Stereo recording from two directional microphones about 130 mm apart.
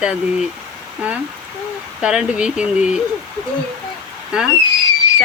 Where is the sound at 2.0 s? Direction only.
5° right (ahead or behind).